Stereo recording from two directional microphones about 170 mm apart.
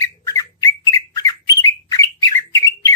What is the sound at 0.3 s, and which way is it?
Bird, 20° left (ahead or behind).